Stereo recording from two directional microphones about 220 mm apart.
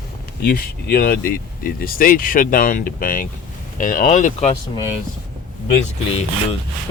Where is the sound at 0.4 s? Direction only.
40° left (ahead or behind).